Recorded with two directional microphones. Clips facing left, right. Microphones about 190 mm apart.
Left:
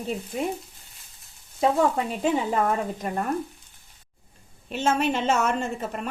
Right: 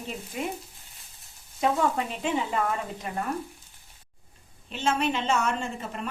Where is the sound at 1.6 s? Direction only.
40° left (ahead or behind).